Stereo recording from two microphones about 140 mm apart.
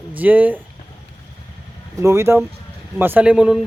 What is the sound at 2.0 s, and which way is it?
Speech, 20° right (ahead or behind).